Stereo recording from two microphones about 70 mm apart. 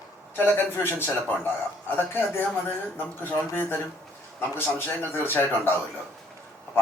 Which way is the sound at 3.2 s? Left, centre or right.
Left.